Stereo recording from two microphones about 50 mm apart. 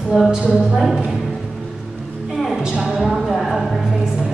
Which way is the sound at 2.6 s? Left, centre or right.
Centre.